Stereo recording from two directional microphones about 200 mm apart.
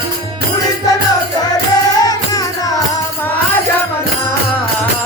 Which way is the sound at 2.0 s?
20° left (ahead or behind).